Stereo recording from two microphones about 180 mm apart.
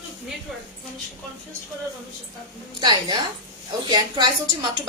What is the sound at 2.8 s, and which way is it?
Speech, 25° right (ahead or behind).